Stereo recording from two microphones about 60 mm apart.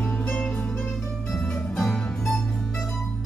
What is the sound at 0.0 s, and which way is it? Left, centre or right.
Music, left.